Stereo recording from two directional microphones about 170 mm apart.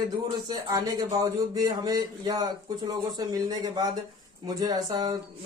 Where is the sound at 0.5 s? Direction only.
20° right (ahead or behind).